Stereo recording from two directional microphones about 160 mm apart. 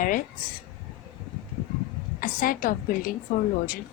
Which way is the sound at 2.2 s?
60° left (ahead or behind).